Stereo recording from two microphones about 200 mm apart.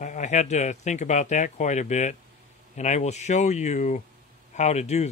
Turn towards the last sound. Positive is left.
turn(degrees=35)  # may be behind; listen again after turning